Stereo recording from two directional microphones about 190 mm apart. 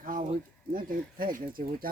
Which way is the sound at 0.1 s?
45° right (ahead or behind).